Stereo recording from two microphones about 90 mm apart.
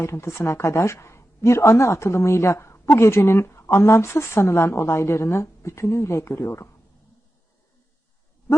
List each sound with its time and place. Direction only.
0.0 s speech: 30° left (ahead or behind)